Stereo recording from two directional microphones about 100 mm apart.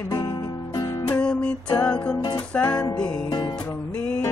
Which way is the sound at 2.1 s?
50° left (ahead or behind).